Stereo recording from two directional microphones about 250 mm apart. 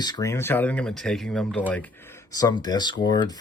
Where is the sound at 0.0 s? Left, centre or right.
Centre.